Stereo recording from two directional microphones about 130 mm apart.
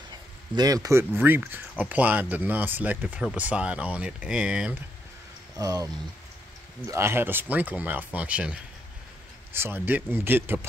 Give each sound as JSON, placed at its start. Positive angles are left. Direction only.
{"t": 0.6, "sound": "speech", "side_deg": -30}
{"t": 5.6, "sound": "speech", "side_deg": -30}
{"t": 6.9, "sound": "speech", "side_deg": -20}
{"t": 9.6, "sound": "speech", "side_deg": -15}